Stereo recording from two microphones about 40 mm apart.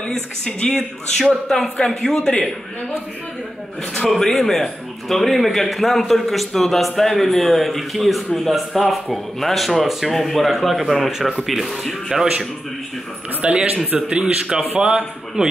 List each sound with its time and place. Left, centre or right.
0.0 s speech: left
1.1 s speech: centre
4.1 s speech: centre
11.1 s speech: centre
11.4 s speech: centre
12.1 s speech: centre
13.4 s a man's voice: right